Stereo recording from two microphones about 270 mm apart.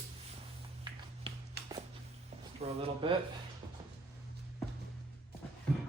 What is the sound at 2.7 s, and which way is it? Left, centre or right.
Speech, right.